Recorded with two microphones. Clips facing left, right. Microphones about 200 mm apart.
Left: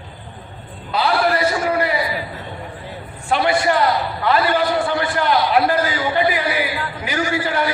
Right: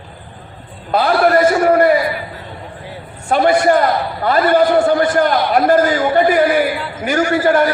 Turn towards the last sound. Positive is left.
turn(degrees=-50)  # may be behind; listen again after turning